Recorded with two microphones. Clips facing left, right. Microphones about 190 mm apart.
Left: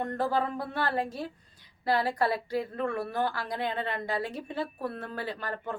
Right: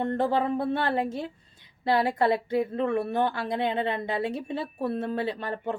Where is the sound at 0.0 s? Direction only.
25° right (ahead or behind).